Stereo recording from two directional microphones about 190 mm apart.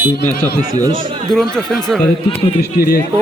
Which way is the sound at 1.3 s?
Centre (ahead or behind).